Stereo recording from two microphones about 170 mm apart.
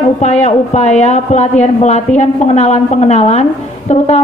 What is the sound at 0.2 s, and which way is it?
A woman's voice, 40° left (ahead or behind).